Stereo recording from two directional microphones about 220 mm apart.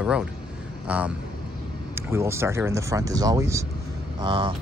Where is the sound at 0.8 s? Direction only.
5° right (ahead or behind).